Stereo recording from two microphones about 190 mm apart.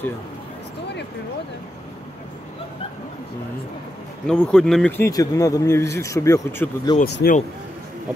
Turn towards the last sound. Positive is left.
turn(degrees=60)  # may be behind; listen again after turning